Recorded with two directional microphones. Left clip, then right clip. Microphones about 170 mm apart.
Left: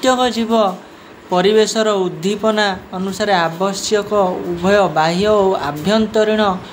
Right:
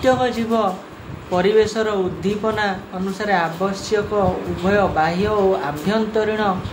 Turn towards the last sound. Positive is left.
turn(degrees=45)  # may be behind; listen again after turning